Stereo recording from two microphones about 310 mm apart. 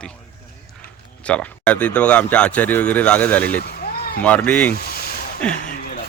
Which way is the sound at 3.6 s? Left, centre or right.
Left.